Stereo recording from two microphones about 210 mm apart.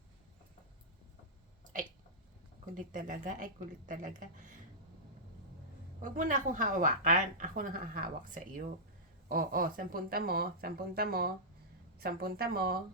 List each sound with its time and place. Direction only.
2.7 s a woman's voice: 40° right (ahead or behind)
6.0 s a woman's voice: 40° right (ahead or behind)